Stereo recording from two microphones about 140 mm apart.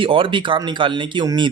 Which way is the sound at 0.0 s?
40° right (ahead or behind).